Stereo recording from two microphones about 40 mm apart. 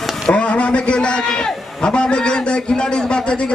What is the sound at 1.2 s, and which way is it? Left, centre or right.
A man's voice, centre.